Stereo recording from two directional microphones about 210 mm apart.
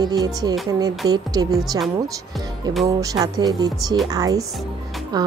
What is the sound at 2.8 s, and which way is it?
Speech, 15° right (ahead or behind).